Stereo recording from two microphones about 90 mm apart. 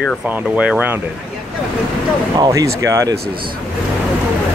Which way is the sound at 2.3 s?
40° right (ahead or behind).